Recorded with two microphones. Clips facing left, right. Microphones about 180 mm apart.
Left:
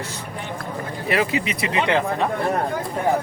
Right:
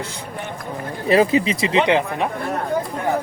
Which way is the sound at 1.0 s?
30° right (ahead or behind).